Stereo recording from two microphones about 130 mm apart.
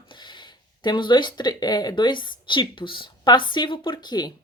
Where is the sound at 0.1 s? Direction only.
35° left (ahead or behind).